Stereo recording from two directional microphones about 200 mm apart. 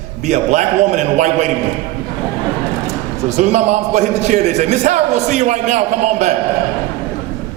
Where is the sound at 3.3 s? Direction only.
35° right (ahead or behind).